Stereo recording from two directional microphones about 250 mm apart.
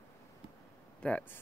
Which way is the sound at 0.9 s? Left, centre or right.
Centre.